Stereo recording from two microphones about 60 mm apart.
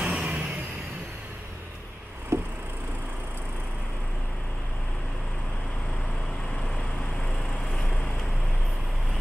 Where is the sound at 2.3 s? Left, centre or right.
Right.